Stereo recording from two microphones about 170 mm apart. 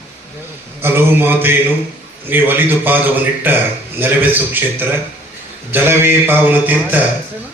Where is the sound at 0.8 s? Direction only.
15° right (ahead or behind).